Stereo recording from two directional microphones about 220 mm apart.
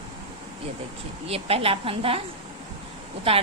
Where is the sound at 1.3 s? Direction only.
25° right (ahead or behind).